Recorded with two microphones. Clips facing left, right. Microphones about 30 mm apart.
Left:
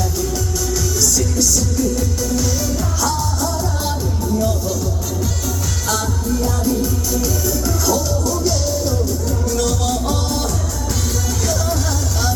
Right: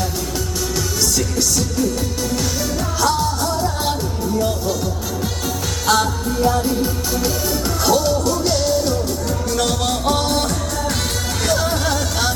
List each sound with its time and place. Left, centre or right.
0.7 s music: right
5.9 s music: right
11.4 s music: right